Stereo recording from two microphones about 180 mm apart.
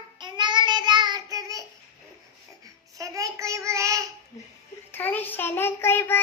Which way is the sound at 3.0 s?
20° right (ahead or behind).